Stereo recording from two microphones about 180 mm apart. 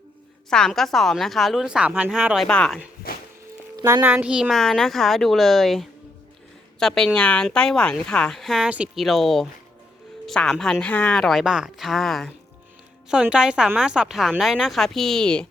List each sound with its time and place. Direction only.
0.5 s a woman's voice: centre (ahead or behind)
3.8 s a child's voice: 20° right (ahead or behind)
4.0 s a woman's voice: 5° right (ahead or behind)